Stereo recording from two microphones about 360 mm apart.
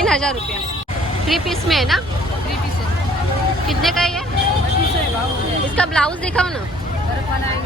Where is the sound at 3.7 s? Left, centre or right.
Centre.